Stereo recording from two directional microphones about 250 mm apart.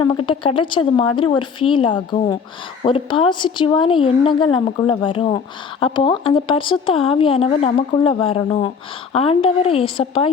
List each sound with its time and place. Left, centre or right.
0.0 s speech: centre